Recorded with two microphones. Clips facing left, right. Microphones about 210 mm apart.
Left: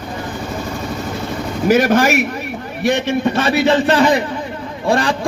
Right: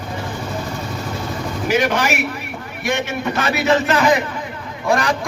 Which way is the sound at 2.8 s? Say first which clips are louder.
Left 6 dB; 35° left (ahead or behind).